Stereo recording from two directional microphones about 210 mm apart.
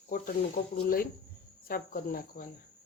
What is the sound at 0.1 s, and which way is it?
Speech, 45° left (ahead or behind).